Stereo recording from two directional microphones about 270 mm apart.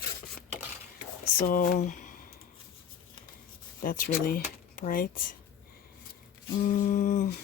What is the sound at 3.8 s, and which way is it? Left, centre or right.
Speech, left.